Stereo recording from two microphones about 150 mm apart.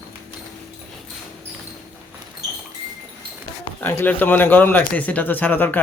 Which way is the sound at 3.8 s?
15° left (ahead or behind).